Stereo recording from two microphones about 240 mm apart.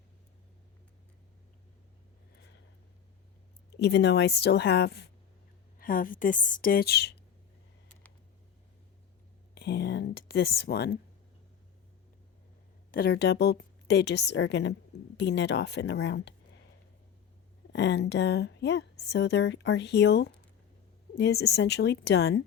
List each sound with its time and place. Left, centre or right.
3.7 s a woman's voice: left
9.6 s speech: left
12.9 s a woman's voice: left
17.7 s a woman's voice: left